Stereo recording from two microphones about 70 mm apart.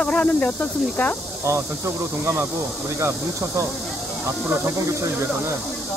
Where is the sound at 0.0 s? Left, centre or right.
Centre.